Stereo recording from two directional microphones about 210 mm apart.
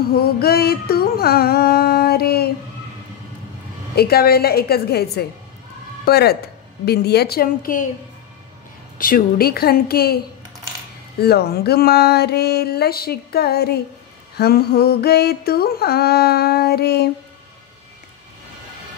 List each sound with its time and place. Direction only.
0.1 s mantra: 45° left (ahead or behind)
3.9 s mantra: 50° left (ahead or behind)
6.0 s a woman's voice: 50° left (ahead or behind)
8.9 s mantra: 40° left (ahead or behind)
11.1 s mantra: 50° left (ahead or behind)